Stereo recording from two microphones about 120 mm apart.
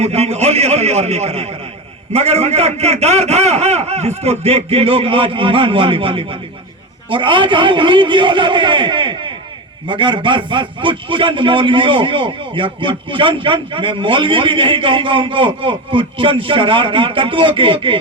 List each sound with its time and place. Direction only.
0.0 s a man's voice: 60° right (ahead or behind); by 18.0 s 45° right (ahead or behind)